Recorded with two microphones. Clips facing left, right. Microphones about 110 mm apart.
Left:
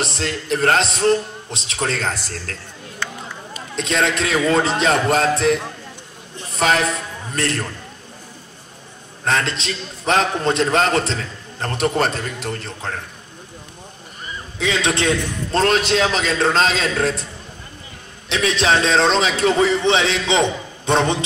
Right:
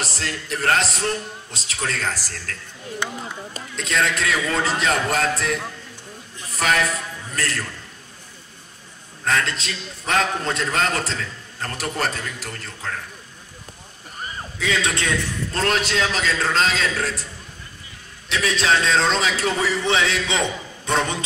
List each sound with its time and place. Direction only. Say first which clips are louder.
0.0 s a man's voice: left 5 dB; 25° left (ahead or behind)
3.0 s speech: even; 15° right (ahead or behind)
3.7 s a man's voice: left 3 dB; 20° left (ahead or behind)
9.2 s a man's voice: left 2 dB; 25° left (ahead or behind)
14.6 s a man's voice: left 4 dB; 20° left (ahead or behind)
18.3 s a man's voice: left 3 dB; 20° left (ahead or behind)